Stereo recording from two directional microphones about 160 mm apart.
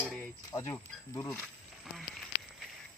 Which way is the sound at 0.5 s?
20° left (ahead or behind).